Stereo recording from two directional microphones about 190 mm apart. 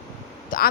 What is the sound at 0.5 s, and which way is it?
Speech, 45° left (ahead or behind).